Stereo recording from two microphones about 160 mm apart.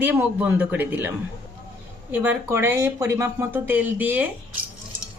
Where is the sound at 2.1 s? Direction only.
10° right (ahead or behind).